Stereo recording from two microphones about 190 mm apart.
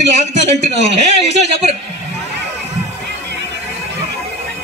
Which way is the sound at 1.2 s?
35° right (ahead or behind).